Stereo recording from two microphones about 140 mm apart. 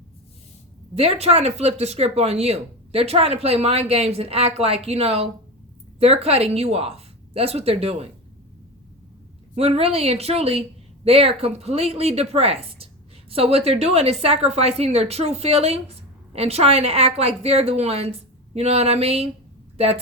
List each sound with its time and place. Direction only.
0.9 s a woman's voice: 45° right (ahead or behind)
9.6 s a woman's voice: 45° right (ahead or behind)